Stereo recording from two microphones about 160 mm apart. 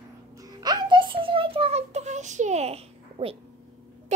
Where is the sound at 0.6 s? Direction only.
25° right (ahead or behind).